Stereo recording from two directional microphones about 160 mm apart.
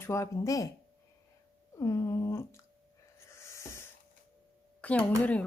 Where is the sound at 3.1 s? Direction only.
15° left (ahead or behind).